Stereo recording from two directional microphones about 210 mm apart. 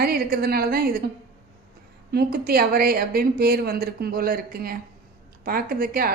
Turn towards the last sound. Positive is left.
turn(degrees=-45)  # may be behind; listen again after turning